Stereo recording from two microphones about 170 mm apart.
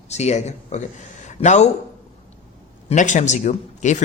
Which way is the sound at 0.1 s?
40° left (ahead or behind).